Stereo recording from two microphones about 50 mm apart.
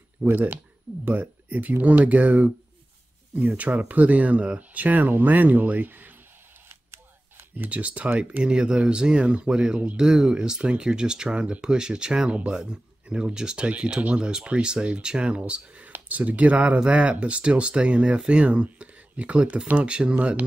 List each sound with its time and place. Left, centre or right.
0.2 s speech: right
0.9 s speech: right
1.5 s speech: right
6.7 s camera: right
7.5 s speech: right
7.8 s speech: right
8.5 s speech: centre
15.8 s speech: right
20.2 s speech: right